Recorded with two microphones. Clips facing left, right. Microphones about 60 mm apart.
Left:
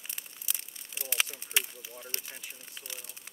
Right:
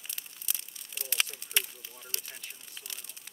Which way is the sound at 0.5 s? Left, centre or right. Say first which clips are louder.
Even; centre.